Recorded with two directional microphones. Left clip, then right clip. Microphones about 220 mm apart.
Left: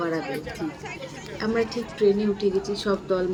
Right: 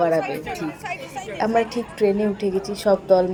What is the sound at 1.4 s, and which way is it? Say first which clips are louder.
Speech: right 5 dB; 25° right (ahead or behind).